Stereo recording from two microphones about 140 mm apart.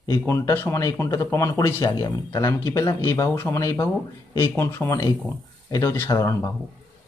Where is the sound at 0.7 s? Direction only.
20° left (ahead or behind).